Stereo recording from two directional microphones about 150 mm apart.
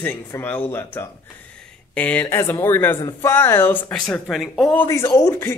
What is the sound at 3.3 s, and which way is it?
Speech, 15° left (ahead or behind).